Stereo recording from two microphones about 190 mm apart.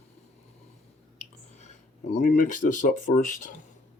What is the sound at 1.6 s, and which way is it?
Speech, 40° left (ahead or behind).